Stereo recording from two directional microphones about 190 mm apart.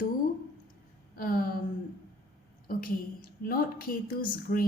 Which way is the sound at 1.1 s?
50° left (ahead or behind).